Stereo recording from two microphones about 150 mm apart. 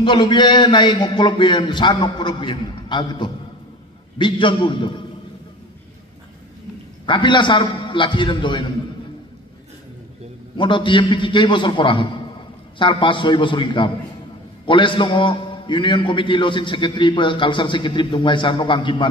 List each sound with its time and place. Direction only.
0.0 s a man's voice: 35° left (ahead or behind)
7.1 s a man's voice: 30° left (ahead or behind)
10.6 s a man's voice: 30° left (ahead or behind)